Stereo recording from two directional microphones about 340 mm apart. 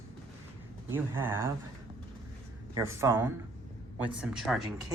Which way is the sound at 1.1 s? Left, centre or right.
Centre.